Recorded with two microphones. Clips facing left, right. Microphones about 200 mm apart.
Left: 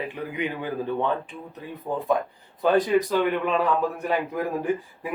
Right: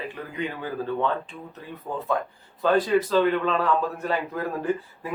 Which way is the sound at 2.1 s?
15° left (ahead or behind).